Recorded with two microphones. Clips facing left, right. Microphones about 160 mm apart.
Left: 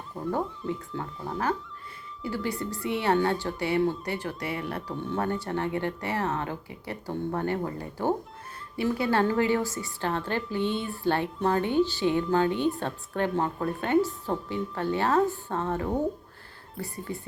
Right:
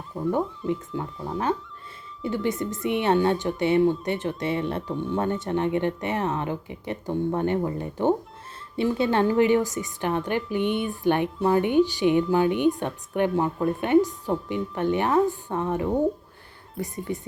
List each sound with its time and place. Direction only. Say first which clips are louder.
0.7 s a woman's voice: right 5 dB; 15° right (ahead or behind)